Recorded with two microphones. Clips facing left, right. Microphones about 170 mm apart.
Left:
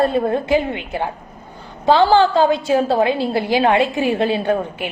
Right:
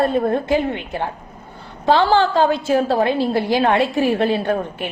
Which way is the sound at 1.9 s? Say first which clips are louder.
Left 2 dB; 35° left (ahead or behind).